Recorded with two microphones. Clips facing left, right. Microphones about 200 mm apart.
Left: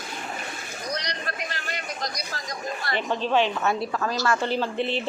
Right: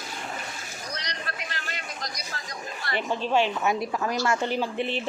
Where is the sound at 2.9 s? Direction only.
10° right (ahead or behind).